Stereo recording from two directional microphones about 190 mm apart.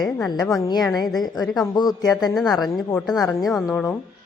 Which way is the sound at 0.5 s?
20° left (ahead or behind).